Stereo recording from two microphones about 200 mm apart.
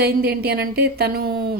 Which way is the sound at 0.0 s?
50° right (ahead or behind).